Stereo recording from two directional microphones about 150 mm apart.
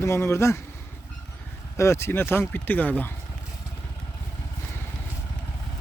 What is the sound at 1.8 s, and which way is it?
Speech, 20° left (ahead or behind).